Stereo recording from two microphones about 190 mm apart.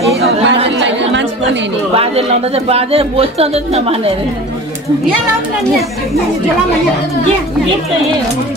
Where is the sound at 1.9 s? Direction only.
30° right (ahead or behind).